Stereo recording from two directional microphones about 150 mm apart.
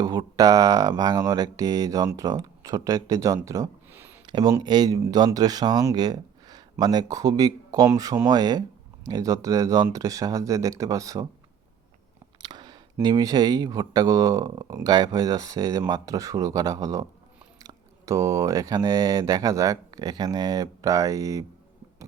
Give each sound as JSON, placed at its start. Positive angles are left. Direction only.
{"t": 0.0, "sound": "speech", "side_deg": -25}
{"t": 4.3, "sound": "speech", "side_deg": -30}
{"t": 12.4, "sound": "speech", "side_deg": -30}